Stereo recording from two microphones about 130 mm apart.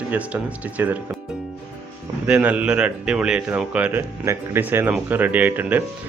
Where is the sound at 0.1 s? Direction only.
10° right (ahead or behind).